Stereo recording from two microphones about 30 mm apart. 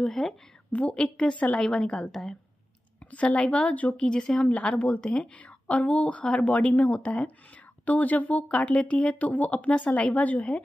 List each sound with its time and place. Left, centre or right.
0.0 s a woman's voice: centre
0.7 s speech: left
1.0 s a woman's voice: left
2.0 s a woman's voice: centre
3.1 s speech: left
3.9 s a woman's voice: left
4.5 s a woman's voice: left
5.8 s speech: left
6.2 s a woman's voice: left
6.5 s speech: left
7.8 s speech: left